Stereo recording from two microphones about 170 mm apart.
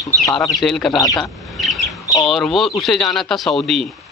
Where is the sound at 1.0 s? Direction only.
20° left (ahead or behind).